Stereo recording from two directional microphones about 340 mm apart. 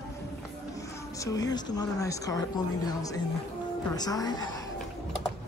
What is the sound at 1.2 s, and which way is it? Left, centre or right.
Speech, centre.